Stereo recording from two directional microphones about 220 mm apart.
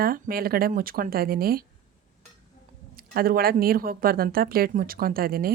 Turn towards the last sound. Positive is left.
turn(degrees=-40)  # may be behind; listen again after turning